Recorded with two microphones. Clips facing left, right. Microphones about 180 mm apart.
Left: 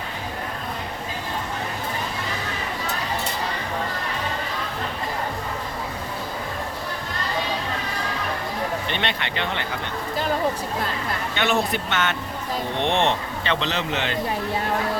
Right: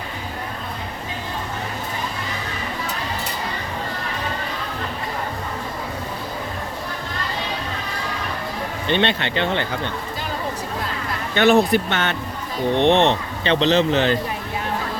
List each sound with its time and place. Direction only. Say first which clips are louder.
8.9 s speech: right 7 dB; 30° right (ahead or behind)
11.3 s speech: right 9 dB; 40° right (ahead or behind)